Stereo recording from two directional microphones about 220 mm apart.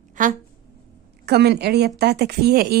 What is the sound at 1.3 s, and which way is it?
Speech, 50° right (ahead or behind).